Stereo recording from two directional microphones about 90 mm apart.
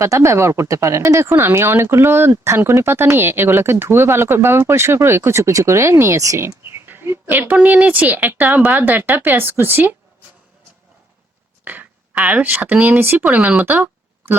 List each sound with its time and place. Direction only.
0.0 s speech: 35° right (ahead or behind)
11.6 s speech: 20° right (ahead or behind)